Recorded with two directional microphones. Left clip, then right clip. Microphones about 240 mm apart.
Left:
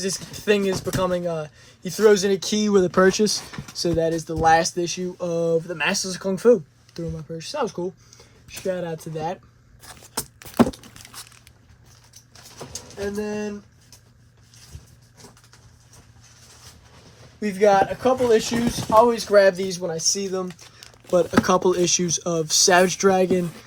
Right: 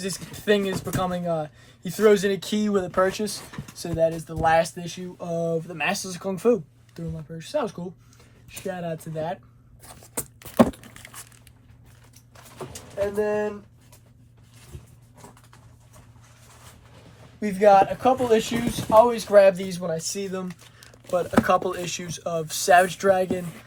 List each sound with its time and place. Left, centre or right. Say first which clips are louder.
0.0 s speech: left 3 dB; left
9.8 s keys jangling: left 4 dB; centre
10.4 s a sound: right 1 dB; centre
12.7 s vehicle: right 3 dB; centre
17.4 s speech: right 1 dB; left
20.8 s a sound: left 5 dB; left
21.4 s speech: left 3 dB; left